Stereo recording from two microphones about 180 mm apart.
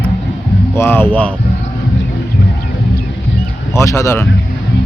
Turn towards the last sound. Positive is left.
turn(degrees=15)  # may be behind; listen again after turning